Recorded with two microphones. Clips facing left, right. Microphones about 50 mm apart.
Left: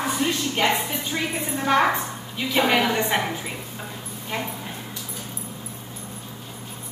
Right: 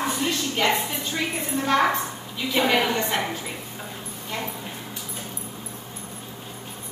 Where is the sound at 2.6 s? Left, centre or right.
Centre.